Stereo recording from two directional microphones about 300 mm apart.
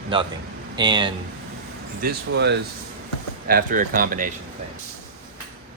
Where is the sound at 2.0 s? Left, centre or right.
Right.